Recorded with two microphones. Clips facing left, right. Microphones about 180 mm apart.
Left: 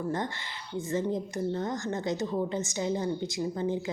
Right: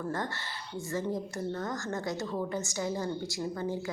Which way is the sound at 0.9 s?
20° left (ahead or behind).